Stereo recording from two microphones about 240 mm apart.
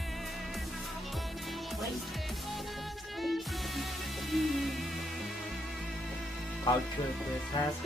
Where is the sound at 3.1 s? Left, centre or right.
Centre.